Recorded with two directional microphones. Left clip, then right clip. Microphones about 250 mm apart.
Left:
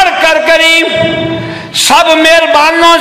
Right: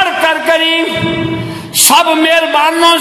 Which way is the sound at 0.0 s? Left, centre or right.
Right.